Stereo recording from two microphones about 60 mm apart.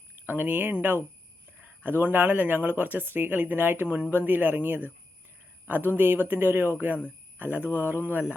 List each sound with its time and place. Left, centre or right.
0.3 s speech: right